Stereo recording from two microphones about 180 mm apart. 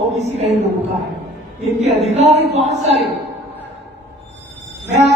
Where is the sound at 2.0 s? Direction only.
40° right (ahead or behind).